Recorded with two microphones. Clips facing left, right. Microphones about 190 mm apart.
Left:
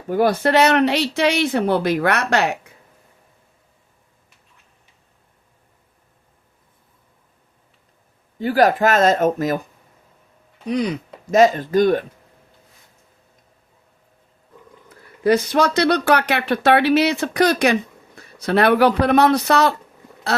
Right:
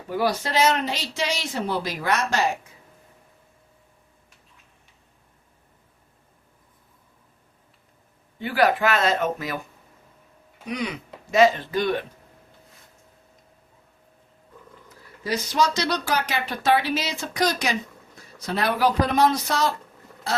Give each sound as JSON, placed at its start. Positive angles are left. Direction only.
{"t": 0.1, "sound": "speech", "side_deg": 55}
{"t": 8.4, "sound": "speech", "side_deg": 40}
{"t": 10.7, "sound": "speech", "side_deg": 35}
{"t": 15.2, "sound": "speech", "side_deg": 55}